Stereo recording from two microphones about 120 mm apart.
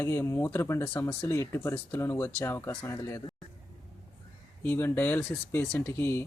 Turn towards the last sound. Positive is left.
turn(degrees=20)  # may be behind; listen again after turning